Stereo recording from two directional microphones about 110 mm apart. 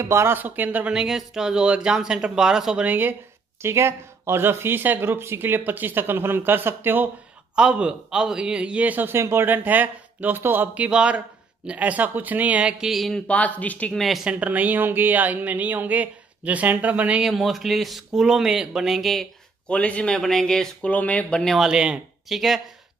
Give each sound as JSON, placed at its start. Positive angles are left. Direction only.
{"t": 0.0, "sound": "a man's voice", "side_deg": -25}
{"t": 12.9, "sound": "speech", "side_deg": 0}
{"t": 13.3, "sound": "speech", "side_deg": 15}
{"t": 14.0, "sound": "speech", "side_deg": 0}
{"t": 14.4, "sound": "a man's voice", "side_deg": -15}
{"t": 17.3, "sound": "speech", "side_deg": 0}
{"t": 19.7, "sound": "speech", "side_deg": 10}